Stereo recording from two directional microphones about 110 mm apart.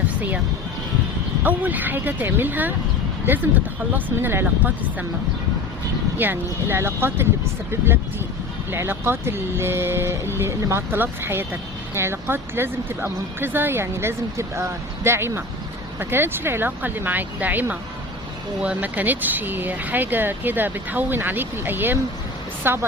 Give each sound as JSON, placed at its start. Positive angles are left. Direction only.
{"t": 0.2, "sound": "speech", "side_deg": -15}
{"t": 1.5, "sound": "speech", "side_deg": -15}
{"t": 6.1, "sound": "speech", "side_deg": -20}
{"t": 8.7, "sound": "speech", "side_deg": -20}